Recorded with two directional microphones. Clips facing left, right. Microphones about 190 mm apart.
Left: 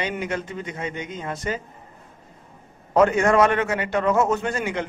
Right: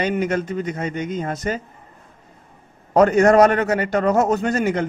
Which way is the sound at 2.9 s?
40° right (ahead or behind).